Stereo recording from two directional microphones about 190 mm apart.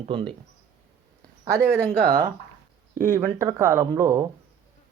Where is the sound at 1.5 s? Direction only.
15° right (ahead or behind).